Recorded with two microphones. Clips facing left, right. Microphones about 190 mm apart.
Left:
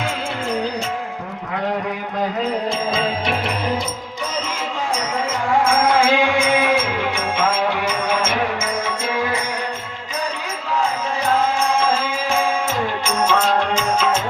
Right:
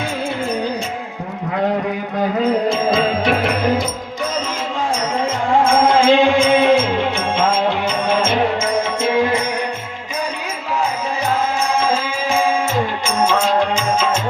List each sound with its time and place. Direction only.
3.2 s music: 50° right (ahead or behind)
5.8 s music: 30° right (ahead or behind)
13.1 s music: centre (ahead or behind)